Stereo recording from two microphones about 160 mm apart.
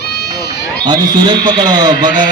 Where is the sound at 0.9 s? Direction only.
30° right (ahead or behind).